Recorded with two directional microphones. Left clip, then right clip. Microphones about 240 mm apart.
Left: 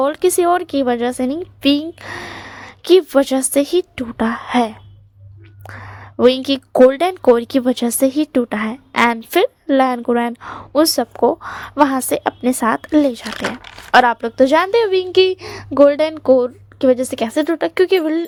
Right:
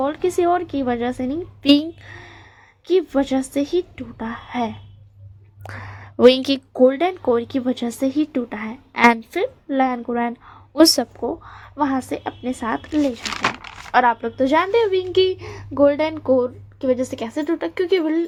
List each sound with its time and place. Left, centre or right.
0.0 s a woman's voice: left
1.6 s a woman's voice: centre
2.0 s a woman's voice: left
5.6 s speech: centre
6.8 s a woman's voice: left
10.8 s a woman's voice: centre
11.1 s a woman's voice: left
13.3 s speech: centre
13.9 s a woman's voice: left